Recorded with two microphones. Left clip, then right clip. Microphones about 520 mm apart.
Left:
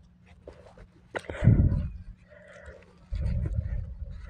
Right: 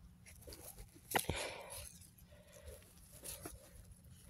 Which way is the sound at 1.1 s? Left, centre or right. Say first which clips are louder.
Left 7 dB; right.